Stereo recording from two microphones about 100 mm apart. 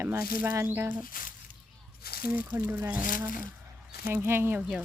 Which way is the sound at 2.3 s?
15° right (ahead or behind).